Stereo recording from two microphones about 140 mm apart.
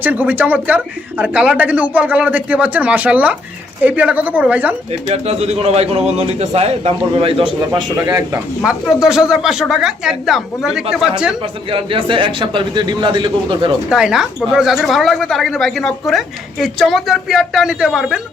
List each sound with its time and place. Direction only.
0.0 s speech: 10° right (ahead or behind)
4.9 s a man's voice: 50° right (ahead or behind)
7.7 s speech: 30° right (ahead or behind)
8.6 s speech: 5° right (ahead or behind)
11.7 s a man's voice: 40° right (ahead or behind)
13.9 s speech: 5° right (ahead or behind)